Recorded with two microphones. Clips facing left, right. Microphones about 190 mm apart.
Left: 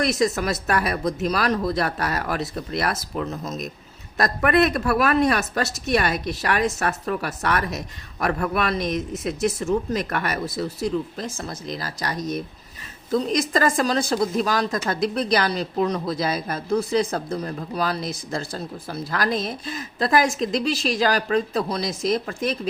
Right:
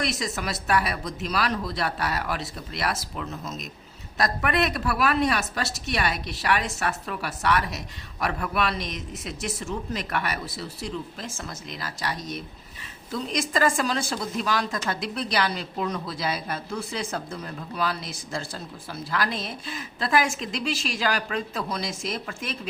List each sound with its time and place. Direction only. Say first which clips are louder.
0.0 s speech: left 8 dB; 50° left (ahead or behind)
4.2 s speech: left 6 dB; 50° left (ahead or behind)